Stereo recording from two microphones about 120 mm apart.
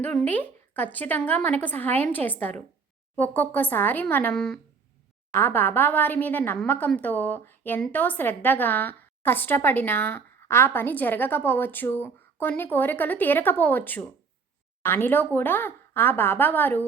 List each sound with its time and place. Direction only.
0.3 s a woman's voice: 15° left (ahead or behind)
4.4 s speech: 5° left (ahead or behind)
5.3 s a woman's voice: 20° left (ahead or behind)